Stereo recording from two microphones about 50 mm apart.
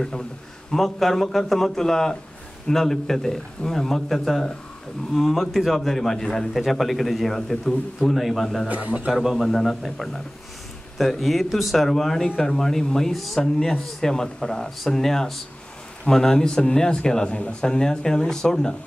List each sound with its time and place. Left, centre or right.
0.7 s a man's voice: centre
8.6 s a man's voice: right
9.1 s a man's voice: centre